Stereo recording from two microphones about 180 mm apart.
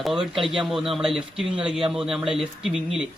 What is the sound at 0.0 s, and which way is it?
Speech, centre (ahead or behind).